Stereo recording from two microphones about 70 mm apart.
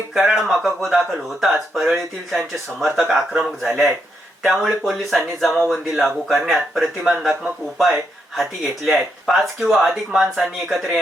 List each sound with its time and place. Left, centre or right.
0.1 s speech: centre
8.4 s speech: centre